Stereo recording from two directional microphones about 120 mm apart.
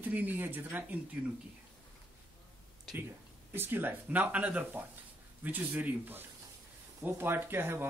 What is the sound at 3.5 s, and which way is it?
Speech, 20° right (ahead or behind).